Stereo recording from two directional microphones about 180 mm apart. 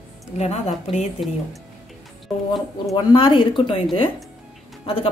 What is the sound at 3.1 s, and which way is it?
Speech, 30° left (ahead or behind).